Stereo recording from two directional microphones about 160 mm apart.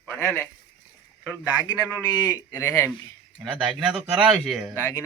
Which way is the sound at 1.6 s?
20° left (ahead or behind).